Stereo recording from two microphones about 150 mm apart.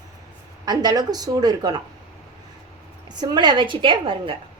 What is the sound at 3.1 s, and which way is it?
A woman's voice, 30° right (ahead or behind).